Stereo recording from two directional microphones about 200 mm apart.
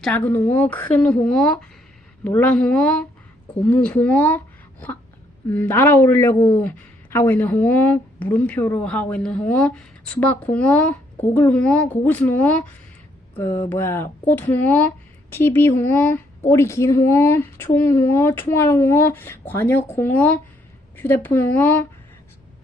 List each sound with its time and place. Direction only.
0.0 s a woman's voice: 5° left (ahead or behind)
5.5 s a woman's voice: 10° left (ahead or behind)